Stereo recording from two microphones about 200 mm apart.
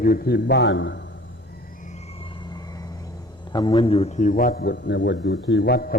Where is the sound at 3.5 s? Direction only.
25° left (ahead or behind); by 6.0 s 50° left (ahead or behind).